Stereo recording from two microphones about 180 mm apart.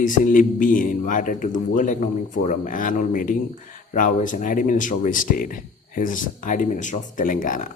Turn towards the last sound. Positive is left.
turn(degrees=45)  # may be behind; listen again after turning